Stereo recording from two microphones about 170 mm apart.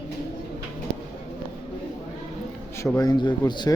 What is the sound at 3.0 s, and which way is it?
Speech, 25° left (ahead or behind).